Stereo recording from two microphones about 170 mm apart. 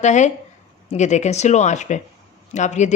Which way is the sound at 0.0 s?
45° left (ahead or behind).